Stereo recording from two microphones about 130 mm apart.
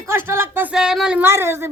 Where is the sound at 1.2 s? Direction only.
20° right (ahead or behind).